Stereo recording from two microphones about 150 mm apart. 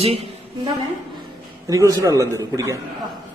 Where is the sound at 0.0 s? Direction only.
40° right (ahead or behind).